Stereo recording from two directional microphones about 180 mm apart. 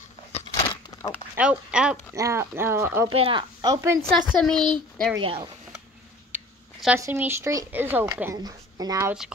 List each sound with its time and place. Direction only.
0.3 s a sound: 25° left (ahead or behind)
1.3 s speech: 5° right (ahead or behind)
2.1 s speech: 15° right (ahead or behind)
3.2 s speech: 25° right (ahead or behind)
4.3 s speech: 5° left (ahead or behind)
5.1 s speech: 25° right (ahead or behind)
6.3 s a sound: 5° right (ahead or behind)
7.0 s speech: 15° right (ahead or behind)